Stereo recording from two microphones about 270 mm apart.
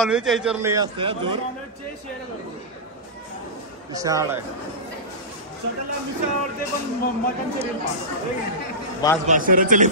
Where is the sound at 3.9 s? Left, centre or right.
Centre.